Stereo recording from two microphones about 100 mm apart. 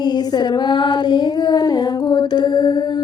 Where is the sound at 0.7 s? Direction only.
50° left (ahead or behind).